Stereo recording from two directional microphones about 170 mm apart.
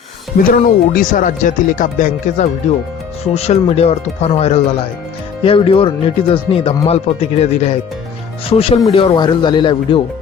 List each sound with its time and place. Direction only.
0.3 s speech: 55° left (ahead or behind); by 10.0 s 30° left (ahead or behind)